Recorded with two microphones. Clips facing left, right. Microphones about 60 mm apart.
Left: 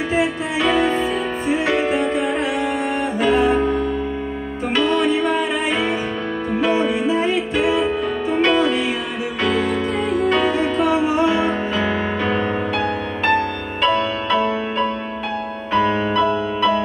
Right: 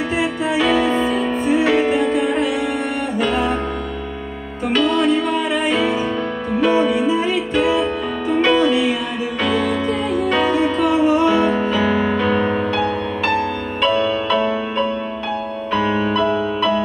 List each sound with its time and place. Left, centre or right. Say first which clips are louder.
0.1 s music: even; centre